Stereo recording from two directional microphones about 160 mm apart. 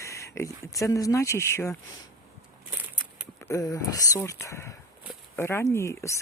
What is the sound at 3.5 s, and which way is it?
Speech, 20° left (ahead or behind).